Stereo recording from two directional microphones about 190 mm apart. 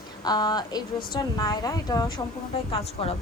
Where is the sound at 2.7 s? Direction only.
30° left (ahead or behind).